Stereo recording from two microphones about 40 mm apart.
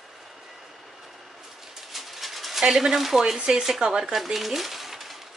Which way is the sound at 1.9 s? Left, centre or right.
Centre.